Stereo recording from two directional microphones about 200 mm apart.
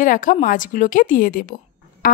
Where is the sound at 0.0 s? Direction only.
40° left (ahead or behind).